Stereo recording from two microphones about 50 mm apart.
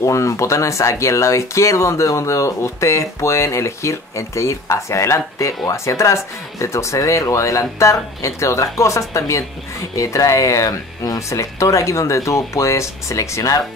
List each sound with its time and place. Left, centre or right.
0.0 s speech: left